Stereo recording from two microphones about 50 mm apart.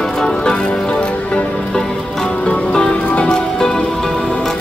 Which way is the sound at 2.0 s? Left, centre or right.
Centre.